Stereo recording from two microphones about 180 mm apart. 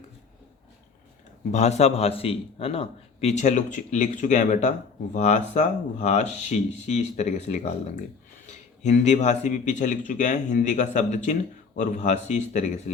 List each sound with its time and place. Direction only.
1.5 s a man's voice: 40° left (ahead or behind)